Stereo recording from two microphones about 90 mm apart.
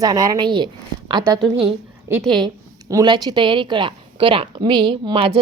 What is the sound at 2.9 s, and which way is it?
A woman's voice, 50° right (ahead or behind).